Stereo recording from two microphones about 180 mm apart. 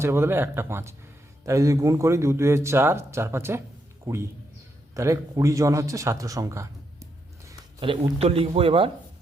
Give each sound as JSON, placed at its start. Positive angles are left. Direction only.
{"t": 0.0, "sound": "a man's voice", "side_deg": -15}
{"t": 7.8, "sound": "speech", "side_deg": -30}